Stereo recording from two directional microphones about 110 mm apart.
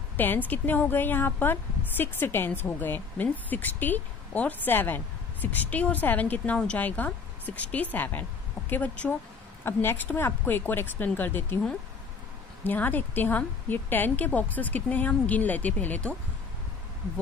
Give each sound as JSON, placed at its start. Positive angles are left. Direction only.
{"t": 0.2, "sound": "a woman's voice", "side_deg": 15}
{"t": 12.6, "sound": "a woman's voice", "side_deg": 15}